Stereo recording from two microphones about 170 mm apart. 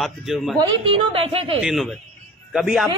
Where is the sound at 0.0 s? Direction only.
Centre (ahead or behind).